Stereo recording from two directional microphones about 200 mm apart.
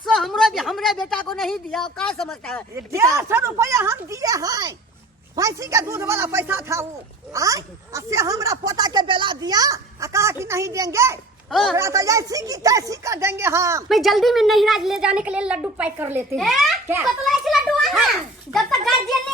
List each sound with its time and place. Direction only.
0.0 s a sound: centre (ahead or behind)
2.7 s speech: 15° right (ahead or behind)
13.8 s speech: centre (ahead or behind)
16.3 s speech: centre (ahead or behind)
17.2 s children playing: centre (ahead or behind)